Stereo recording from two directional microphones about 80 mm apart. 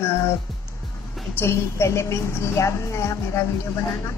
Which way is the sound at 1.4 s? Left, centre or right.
Left.